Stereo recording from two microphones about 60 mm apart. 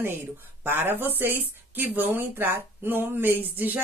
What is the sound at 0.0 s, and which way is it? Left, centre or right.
A woman's voice, right.